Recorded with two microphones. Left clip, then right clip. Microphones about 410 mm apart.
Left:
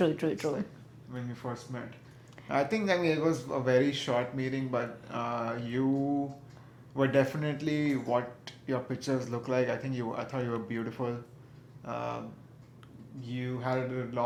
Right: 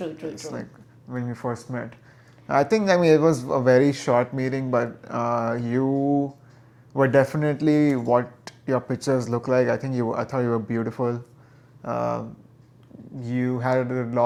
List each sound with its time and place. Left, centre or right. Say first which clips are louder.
0.2 s speech: left 2 dB; left
1.1 s speech: right 10 dB; right
11.8 s speech: right 10 dB; right
13.2 s speech: right 10 dB; right